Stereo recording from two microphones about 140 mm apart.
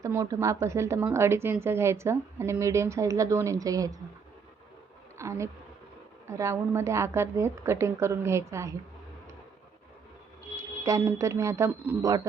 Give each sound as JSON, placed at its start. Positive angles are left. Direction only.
{"t": 0.0, "sound": "a woman's voice", "side_deg": -20}
{"t": 5.1, "sound": "a sound", "side_deg": -20}
{"t": 6.2, "sound": "a woman's voice", "side_deg": -20}
{"t": 10.6, "sound": "a woman's voice", "side_deg": -20}